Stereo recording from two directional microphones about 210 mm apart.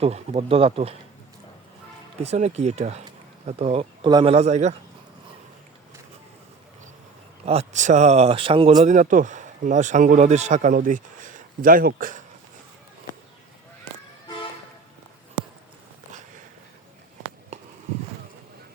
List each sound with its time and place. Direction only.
0.0 s speech: 30° right (ahead or behind)
2.1 s speech: 30° right (ahead or behind)
7.4 s speech: 30° right (ahead or behind)